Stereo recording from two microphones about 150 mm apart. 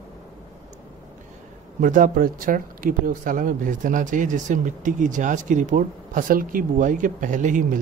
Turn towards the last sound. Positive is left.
turn(degrees=-60)  # may be behind; listen again after turning